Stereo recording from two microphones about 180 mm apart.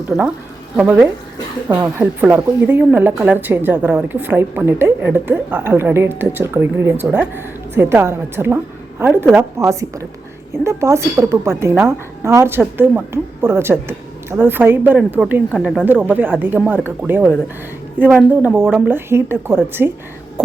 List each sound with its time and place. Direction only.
0.8 s speech: 10° right (ahead or behind)